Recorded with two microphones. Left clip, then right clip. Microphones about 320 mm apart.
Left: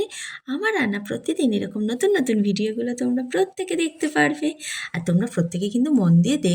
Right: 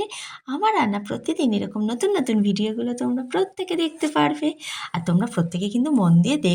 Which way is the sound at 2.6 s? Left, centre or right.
Right.